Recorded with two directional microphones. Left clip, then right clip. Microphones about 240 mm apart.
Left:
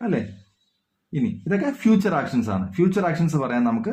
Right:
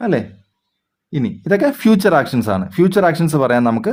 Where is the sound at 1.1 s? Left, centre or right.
Right.